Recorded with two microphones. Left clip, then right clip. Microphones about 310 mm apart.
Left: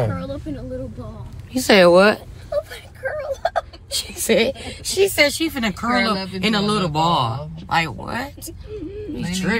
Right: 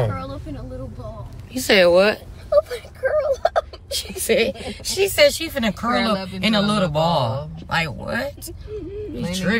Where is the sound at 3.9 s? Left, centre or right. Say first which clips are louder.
Left 2 dB; left; by 9.6 s centre.